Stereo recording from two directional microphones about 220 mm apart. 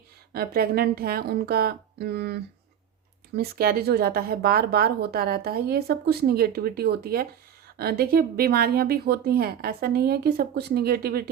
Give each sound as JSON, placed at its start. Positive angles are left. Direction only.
{"t": 0.3, "sound": "speech", "side_deg": -45}